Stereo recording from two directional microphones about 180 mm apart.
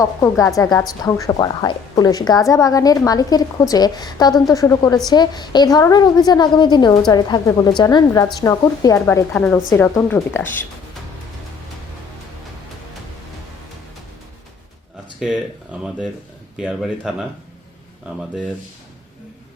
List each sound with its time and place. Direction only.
0.0 s a woman's voice: 20° left (ahead or behind)
15.2 s a man's voice: 5° right (ahead or behind)
16.6 s a man's voice: 5° right (ahead or behind)